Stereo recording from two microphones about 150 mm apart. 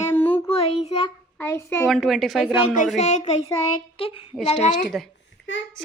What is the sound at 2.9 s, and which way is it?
Speech, 50° left (ahead or behind).